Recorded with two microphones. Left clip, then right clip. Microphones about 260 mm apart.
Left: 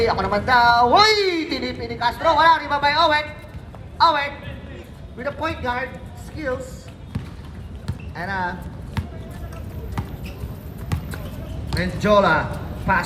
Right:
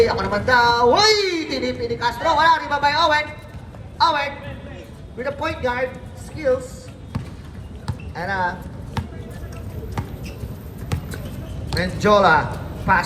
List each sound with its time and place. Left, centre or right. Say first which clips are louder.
0.0 s a woman's voice: right 2 dB; left
8.1 s speech: right 3 dB; centre
9.0 s basketball bounce: right 3 dB; centre
11.8 s a man's voice: right 2 dB; centre